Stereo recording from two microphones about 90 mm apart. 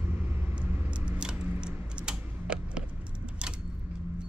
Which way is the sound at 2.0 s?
10° right (ahead or behind).